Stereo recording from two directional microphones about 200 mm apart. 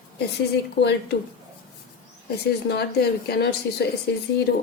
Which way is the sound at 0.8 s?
55° left (ahead or behind).